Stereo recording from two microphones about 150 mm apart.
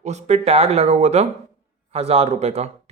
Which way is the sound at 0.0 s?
50° right (ahead or behind).